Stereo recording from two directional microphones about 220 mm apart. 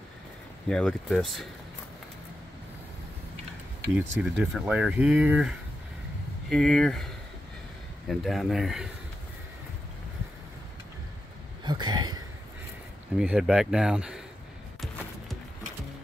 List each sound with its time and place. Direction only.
0.7 s speech: 5° left (ahead or behind)
3.9 s speech: 5° right (ahead or behind)
8.1 s speech: centre (ahead or behind)
11.6 s a sound: 20° right (ahead or behind)
13.2 s speech: 5° right (ahead or behind)